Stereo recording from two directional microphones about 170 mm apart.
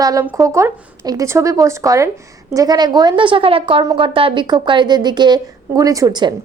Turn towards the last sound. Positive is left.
turn(degrees=-25)  # may be behind; listen again after turning